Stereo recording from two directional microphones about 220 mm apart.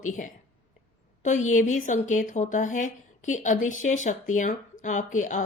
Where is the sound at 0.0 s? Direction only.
35° left (ahead or behind).